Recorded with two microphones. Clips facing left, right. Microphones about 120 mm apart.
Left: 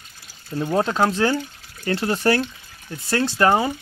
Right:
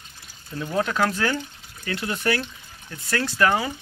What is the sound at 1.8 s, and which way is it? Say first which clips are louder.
Speech: left 6 dB; 35° left (ahead or behind).